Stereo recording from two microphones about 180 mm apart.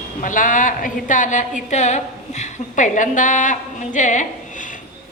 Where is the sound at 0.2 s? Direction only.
45° left (ahead or behind).